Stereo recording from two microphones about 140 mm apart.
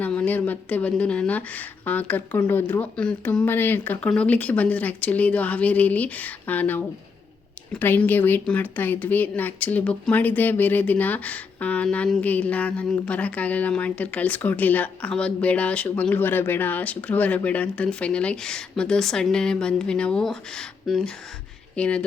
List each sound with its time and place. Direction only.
0.0 s speech: 10° left (ahead or behind)